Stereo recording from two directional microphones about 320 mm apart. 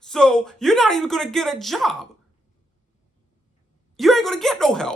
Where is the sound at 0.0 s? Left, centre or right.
Centre.